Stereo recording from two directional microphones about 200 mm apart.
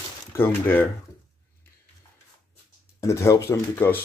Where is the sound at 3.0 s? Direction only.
15° left (ahead or behind).